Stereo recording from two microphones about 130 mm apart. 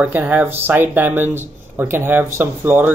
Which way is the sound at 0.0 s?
15° right (ahead or behind).